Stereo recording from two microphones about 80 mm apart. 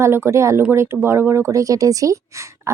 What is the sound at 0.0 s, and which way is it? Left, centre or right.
A woman's voice, right.